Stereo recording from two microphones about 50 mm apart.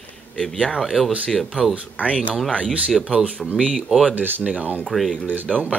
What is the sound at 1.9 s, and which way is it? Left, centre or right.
Speech, left.